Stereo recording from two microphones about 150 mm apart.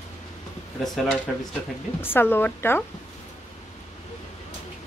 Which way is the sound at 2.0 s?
15° left (ahead or behind).